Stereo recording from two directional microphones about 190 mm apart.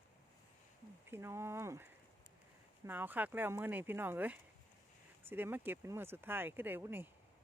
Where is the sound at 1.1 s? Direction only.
15° right (ahead or behind).